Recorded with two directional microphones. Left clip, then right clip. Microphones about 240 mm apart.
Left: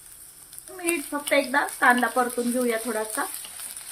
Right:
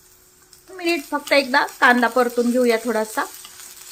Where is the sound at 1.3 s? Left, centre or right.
Right.